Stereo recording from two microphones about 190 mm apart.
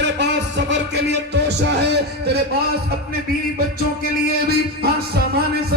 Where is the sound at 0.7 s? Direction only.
65° right (ahead or behind).